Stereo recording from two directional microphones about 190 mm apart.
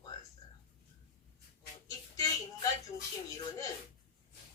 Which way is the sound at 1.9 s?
20° left (ahead or behind).